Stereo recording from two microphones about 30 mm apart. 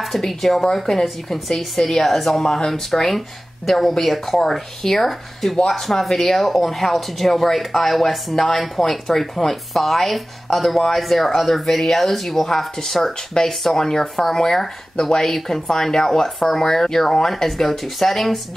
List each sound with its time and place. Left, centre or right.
0.0 s speech: centre